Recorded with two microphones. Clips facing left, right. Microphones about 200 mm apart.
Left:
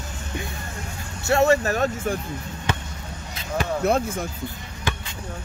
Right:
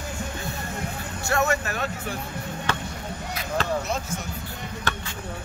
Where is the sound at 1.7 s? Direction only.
45° left (ahead or behind).